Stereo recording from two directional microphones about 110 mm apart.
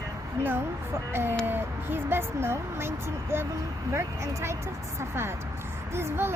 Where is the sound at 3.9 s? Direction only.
25° right (ahead or behind).